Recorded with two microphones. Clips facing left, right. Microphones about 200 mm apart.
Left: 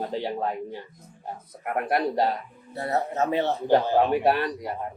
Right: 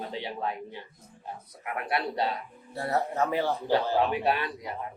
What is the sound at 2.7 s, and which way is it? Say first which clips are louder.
Speech: left 2 dB; 20° left (ahead or behind).